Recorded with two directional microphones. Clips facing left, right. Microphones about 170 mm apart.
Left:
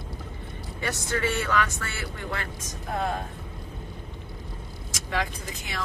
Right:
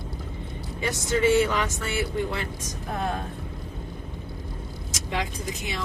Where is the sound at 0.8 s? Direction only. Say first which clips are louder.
Right 4 dB; 15° right (ahead or behind).